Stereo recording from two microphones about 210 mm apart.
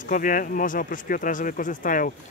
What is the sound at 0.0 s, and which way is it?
Speech, 40° left (ahead or behind).